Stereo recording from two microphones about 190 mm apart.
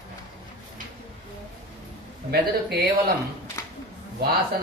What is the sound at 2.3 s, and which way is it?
Speech, 55° right (ahead or behind).